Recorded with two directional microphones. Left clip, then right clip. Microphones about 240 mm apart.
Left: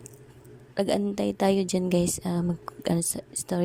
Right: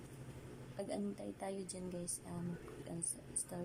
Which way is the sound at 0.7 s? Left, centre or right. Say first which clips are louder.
Left 18 dB; left.